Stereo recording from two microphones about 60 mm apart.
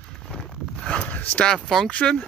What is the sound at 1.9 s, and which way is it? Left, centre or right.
Speech, left.